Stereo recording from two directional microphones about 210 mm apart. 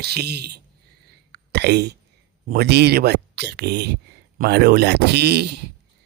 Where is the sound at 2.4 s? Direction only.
50° right (ahead or behind).